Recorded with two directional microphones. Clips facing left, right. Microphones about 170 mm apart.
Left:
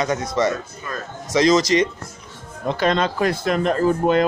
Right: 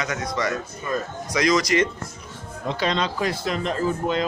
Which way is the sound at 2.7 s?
50° left (ahead or behind).